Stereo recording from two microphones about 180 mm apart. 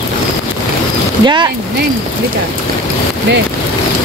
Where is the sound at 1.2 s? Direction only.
25° right (ahead or behind).